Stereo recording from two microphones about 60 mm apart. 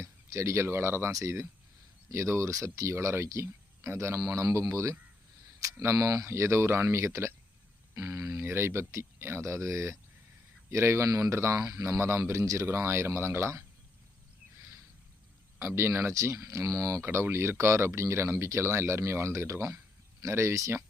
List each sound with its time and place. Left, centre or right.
0.0 s speech: right
4.2 s speech: right
5.5 s camera: right
5.8 s speech: right
6.2 s speech: right
7.9 s speech: right
8.4 s speech: right
11.5 s speech: right
11.9 s speech: right
15.5 s speech: right
16.4 s speech: right
17.0 s speech: right